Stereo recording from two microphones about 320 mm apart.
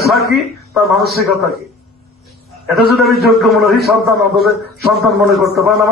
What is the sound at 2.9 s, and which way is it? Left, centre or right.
A man's voice, centre.